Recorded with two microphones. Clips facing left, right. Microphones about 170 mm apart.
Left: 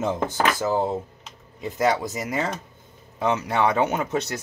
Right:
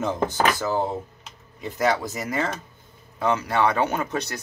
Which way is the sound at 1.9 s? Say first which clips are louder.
Even; 20° left (ahead or behind).